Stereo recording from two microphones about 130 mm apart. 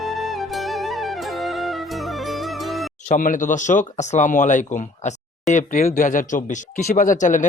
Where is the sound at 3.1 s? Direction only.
90° left.